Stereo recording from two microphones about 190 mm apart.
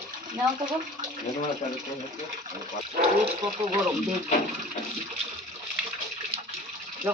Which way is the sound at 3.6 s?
30° right (ahead or behind).